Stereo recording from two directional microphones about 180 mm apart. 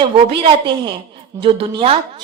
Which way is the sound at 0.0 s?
30° right (ahead or behind).